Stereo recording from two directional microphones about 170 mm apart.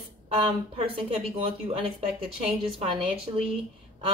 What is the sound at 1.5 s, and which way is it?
Speech, 35° right (ahead or behind).